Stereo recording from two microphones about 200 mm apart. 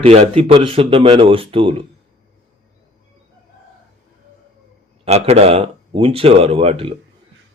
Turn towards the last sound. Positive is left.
turn(degrees=-30)  # may be behind; listen again after turning